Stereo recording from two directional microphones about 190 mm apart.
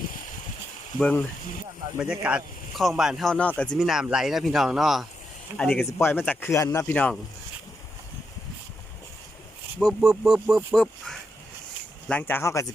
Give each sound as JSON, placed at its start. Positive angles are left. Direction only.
{"t": 0.9, "sound": "speech", "side_deg": 5}
{"t": 2.0, "sound": "speech", "side_deg": -5}
{"t": 9.8, "sound": "speech", "side_deg": 0}